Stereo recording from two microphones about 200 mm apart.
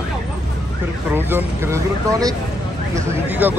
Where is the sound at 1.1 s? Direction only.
10° right (ahead or behind).